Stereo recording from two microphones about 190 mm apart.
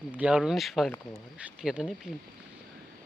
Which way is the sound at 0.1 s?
5° right (ahead or behind).